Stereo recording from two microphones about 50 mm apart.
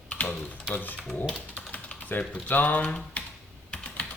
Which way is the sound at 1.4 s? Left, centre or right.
Left.